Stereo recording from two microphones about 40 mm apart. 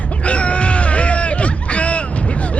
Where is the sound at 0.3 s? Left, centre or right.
Left.